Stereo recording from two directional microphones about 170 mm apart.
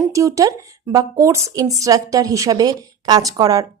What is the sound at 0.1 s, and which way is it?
A woman's voice, 20° right (ahead or behind).